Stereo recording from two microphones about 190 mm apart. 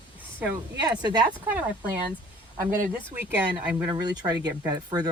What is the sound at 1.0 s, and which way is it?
Speech, 20° right (ahead or behind).